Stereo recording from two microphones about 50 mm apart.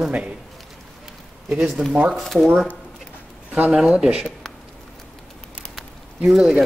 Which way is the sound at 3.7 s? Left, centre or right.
Centre.